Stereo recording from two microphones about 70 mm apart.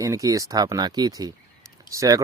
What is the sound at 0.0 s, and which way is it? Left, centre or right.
Speech, right.